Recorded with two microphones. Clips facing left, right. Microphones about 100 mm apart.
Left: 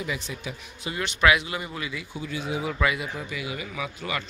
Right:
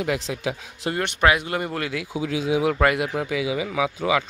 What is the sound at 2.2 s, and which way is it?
Speech, 90° right.